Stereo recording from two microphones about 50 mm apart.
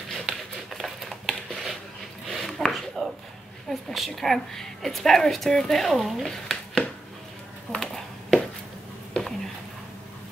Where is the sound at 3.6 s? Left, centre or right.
Centre.